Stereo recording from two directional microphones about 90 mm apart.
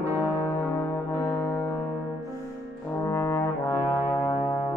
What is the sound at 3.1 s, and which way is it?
Brass instrument, 25° left (ahead or behind).